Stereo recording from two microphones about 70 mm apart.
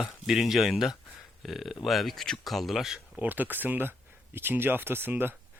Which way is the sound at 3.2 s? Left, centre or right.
Right.